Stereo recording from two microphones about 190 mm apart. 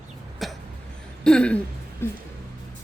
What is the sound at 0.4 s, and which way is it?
Throat clearing, centre (ahead or behind).